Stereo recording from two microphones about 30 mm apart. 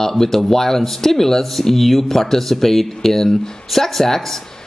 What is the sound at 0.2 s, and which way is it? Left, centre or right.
Speech, centre.